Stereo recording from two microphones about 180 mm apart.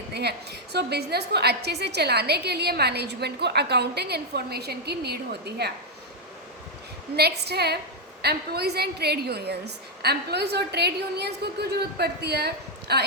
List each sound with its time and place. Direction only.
0.1 s a woman's voice: 65° right (ahead or behind)
7.2 s a woman's voice: 65° right (ahead or behind)